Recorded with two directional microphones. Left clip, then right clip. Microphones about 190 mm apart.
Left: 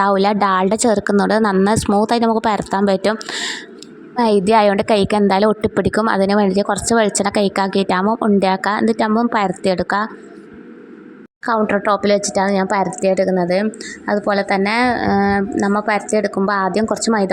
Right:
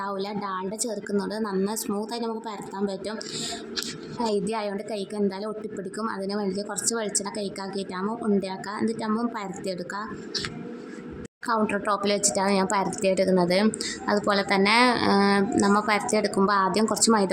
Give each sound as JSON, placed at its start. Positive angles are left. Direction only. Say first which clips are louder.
{"t": 0.0, "sound": "a woman's voice", "louder": "left 16 dB", "side_deg": 45}
{"t": 11.4, "sound": "speech", "louder": "left 9 dB", "side_deg": 30}